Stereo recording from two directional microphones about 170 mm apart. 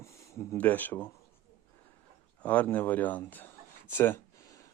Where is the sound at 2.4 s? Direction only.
10° left (ahead or behind).